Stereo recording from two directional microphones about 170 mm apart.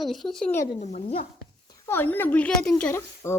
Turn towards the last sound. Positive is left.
turn(degrees=15)  # may be behind; listen again after turning